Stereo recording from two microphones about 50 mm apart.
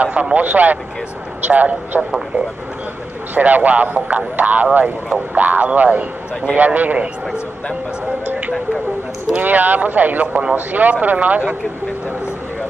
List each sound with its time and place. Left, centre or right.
0.0 s speech: right
3.3 s speech: right
9.3 s speech: right
10.2 s speech: right
10.5 s speech: right